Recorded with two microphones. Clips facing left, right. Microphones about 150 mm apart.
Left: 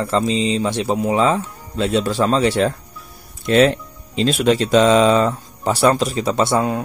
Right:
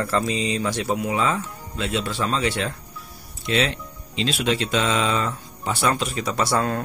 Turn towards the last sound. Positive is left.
turn(degrees=15)  # may be behind; listen again after turning